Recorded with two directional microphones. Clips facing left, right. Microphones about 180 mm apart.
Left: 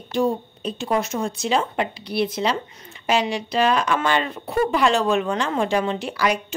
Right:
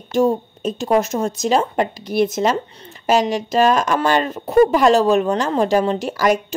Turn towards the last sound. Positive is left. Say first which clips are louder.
# right 5 dB
turn(degrees=-40)  # may be behind; listen again after turning